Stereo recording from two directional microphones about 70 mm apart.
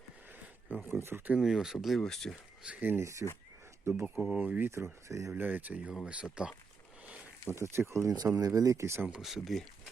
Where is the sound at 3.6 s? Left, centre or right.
Right.